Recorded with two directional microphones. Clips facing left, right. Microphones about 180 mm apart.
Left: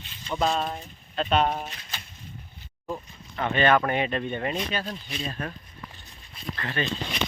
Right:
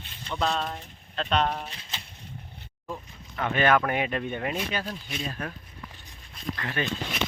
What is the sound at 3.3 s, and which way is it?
Speech, 5° right (ahead or behind).